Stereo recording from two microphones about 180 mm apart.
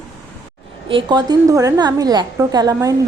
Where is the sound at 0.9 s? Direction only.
25° right (ahead or behind).